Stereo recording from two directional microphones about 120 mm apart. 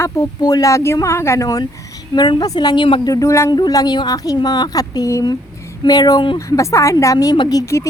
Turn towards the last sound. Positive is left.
turn(degrees=35)  # may be behind; listen again after turning